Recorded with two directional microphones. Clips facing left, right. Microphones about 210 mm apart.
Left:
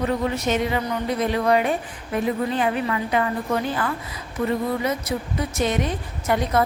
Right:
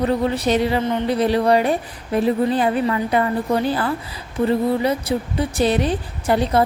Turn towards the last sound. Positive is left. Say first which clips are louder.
# right 4 dB
turn(degrees=-30)  # may be behind; listen again after turning